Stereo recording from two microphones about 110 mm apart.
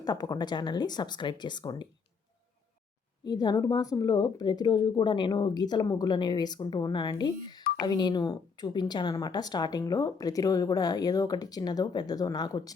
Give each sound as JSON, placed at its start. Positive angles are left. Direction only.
{"t": 0.0, "sound": "a woman's voice", "side_deg": 35}
{"t": 3.2, "sound": "a woman's voice", "side_deg": 35}